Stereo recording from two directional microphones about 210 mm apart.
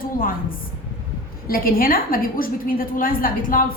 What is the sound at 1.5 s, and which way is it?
A woman's voice, 45° left (ahead or behind).